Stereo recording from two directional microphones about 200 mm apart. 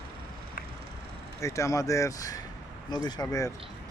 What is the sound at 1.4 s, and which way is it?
A man's voice, 15° left (ahead or behind).